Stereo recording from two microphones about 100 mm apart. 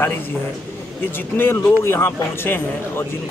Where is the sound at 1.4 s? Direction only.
20° left (ahead or behind).